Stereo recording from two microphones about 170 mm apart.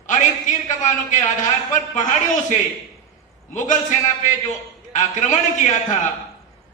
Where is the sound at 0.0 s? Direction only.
45° left (ahead or behind).